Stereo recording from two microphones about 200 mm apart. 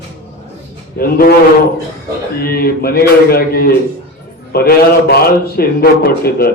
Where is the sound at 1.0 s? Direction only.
50° left (ahead or behind).